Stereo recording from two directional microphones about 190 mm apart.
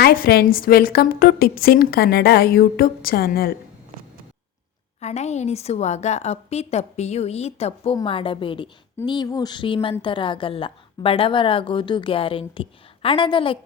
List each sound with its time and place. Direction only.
0.0 s a woman's voice: 50° left (ahead or behind)
4.9 s a woman's voice: 35° left (ahead or behind)